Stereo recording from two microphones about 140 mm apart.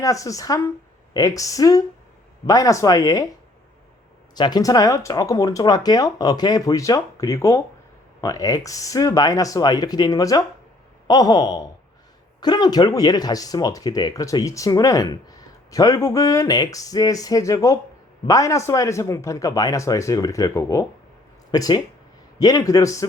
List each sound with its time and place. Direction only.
0.0 s speech: 25° left (ahead or behind)
4.4 s speech: 30° left (ahead or behind)